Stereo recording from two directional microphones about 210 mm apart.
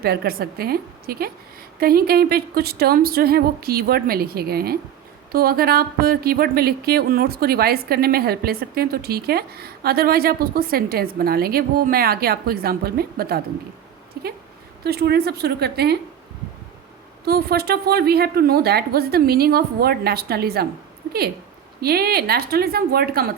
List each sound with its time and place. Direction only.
0.0 s speech: 45° right (ahead or behind)
17.2 s speech: 50° right (ahead or behind)
21.8 s speech: 45° right (ahead or behind)